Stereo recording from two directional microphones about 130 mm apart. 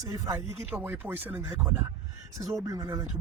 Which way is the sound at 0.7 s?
15° right (ahead or behind).